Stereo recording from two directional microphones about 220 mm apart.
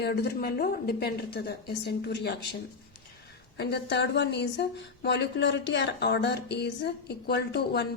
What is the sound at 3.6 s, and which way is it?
Speech, 50° left (ahead or behind).